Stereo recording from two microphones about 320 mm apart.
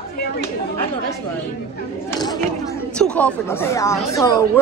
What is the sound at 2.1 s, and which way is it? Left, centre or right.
Speech, centre.